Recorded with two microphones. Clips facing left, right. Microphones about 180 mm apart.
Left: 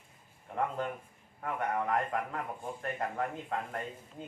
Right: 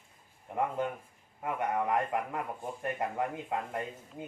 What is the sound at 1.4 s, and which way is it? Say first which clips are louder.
Speech: right 2 dB; 15° right (ahead or behind).